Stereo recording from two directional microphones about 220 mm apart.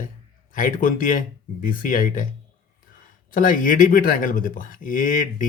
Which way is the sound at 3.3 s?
35° left (ahead or behind).